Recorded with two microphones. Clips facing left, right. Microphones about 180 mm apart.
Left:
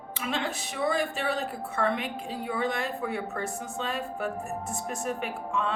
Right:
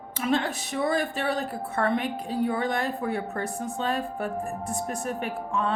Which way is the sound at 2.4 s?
35° right (ahead or behind).